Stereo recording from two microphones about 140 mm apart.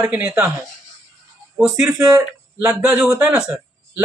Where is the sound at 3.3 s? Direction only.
5° right (ahead or behind).